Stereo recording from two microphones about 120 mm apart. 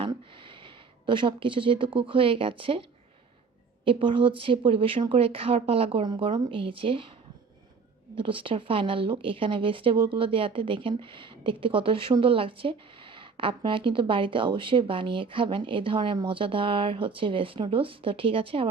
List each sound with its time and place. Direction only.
0.0 s speech: 45° right (ahead or behind)
3.8 s a woman's voice: 45° right (ahead or behind)
8.1 s a woman's voice: 45° right (ahead or behind)